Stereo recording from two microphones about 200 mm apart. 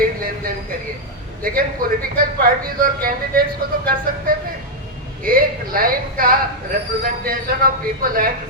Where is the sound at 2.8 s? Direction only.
45° right (ahead or behind).